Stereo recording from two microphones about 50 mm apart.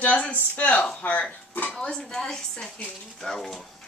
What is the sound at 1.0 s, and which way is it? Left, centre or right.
Music, left.